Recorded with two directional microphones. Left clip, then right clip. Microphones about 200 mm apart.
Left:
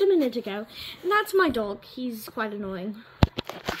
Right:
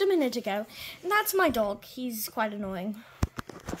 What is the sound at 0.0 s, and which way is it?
Speech, 40° right (ahead or behind).